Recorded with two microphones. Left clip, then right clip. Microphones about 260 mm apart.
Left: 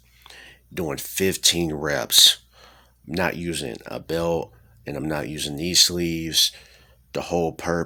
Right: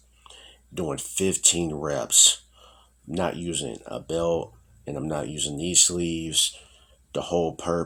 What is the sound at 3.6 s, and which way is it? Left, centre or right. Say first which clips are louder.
Speech: left 2 dB; left.